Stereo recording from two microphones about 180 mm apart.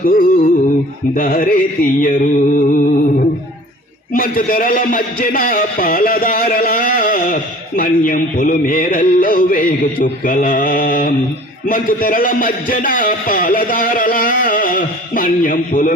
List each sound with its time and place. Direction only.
0.0 s a man's voice: 50° left (ahead or behind)
2.7 s a sound: 50° left (ahead or behind)
4.1 s a man's voice: 55° left (ahead or behind)